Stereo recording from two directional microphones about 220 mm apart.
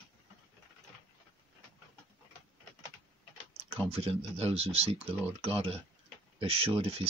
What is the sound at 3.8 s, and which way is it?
Speech, 25° right (ahead or behind).